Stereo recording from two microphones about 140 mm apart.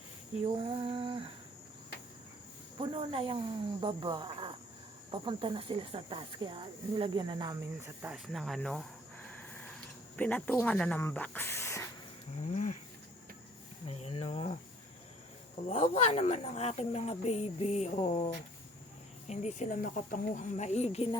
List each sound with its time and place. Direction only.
0.3 s speech: 40° right (ahead or behind)
2.7 s speech: 40° right (ahead or behind); by 8.1 s 20° right (ahead or behind)
8.1 s speech: centre (ahead or behind)
9.3 s snort: 10° left (ahead or behind)
10.2 s speech: 10° left (ahead or behind)
12.4 s speech: 60° left (ahead or behind)
13.8 s speech: 45° left (ahead or behind)
15.6 s speech: 45° left (ahead or behind)
19.3 s speech: 55° left (ahead or behind)